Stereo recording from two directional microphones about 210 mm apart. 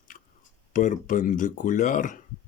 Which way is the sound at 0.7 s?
40° left (ahead or behind).